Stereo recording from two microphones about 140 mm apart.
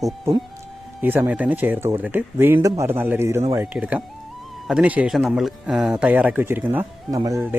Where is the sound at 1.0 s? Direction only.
15° right (ahead or behind).